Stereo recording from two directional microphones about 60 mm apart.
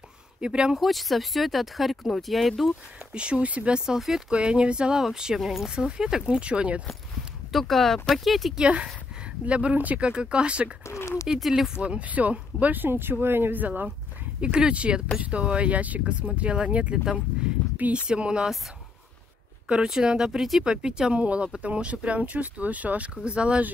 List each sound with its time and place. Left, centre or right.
0.4 s speech: centre
0.7 s speech: centre
3.1 s speech: centre
7.5 s speech: centre
8.5 s speech: centre
10.9 s a sound: left
11.8 s speech: right
14.4 s speech: centre
18.0 s speech: centre
19.9 s speech: centre